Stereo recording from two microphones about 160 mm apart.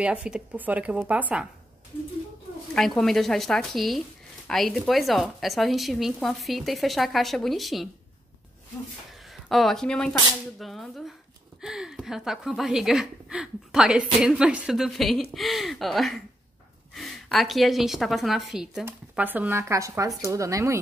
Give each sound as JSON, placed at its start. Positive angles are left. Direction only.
{"t": 0.0, "sound": "speech", "side_deg": -5}
{"t": 3.0, "sound": "speech", "side_deg": 0}
{"t": 9.5, "sound": "speech", "side_deg": 0}